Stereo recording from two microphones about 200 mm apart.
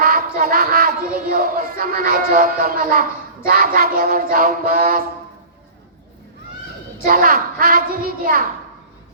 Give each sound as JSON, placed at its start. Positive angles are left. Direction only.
{"t": 0.0, "sound": "a sound", "side_deg": -45}
{"t": 1.3, "sound": "music", "side_deg": -45}
{"t": 7.0, "sound": "music", "side_deg": -45}